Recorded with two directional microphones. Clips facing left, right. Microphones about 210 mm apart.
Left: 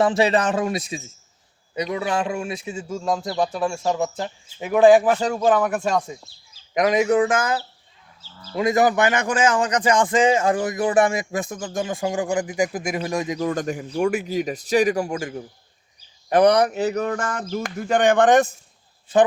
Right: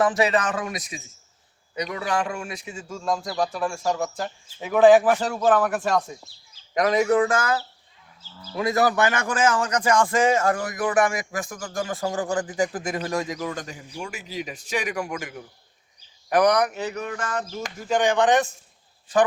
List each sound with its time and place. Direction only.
0.0 s speech: 25° left (ahead or behind); by 4.9 s 10° left (ahead or behind)
4.9 s speech: 5° right (ahead or behind)
6.7 s a man's voice: 20° left (ahead or behind)
13.4 s speech: 45° left (ahead or behind)
17.5 s speech: 60° left (ahead or behind)